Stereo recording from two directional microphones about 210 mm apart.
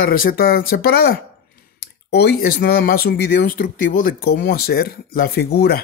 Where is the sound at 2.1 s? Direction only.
50° left (ahead or behind).